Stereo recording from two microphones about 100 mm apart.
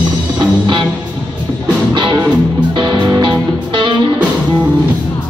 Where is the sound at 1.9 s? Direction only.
50° right (ahead or behind).